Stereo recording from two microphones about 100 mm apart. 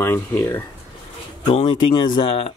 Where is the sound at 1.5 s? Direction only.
75° left (ahead or behind).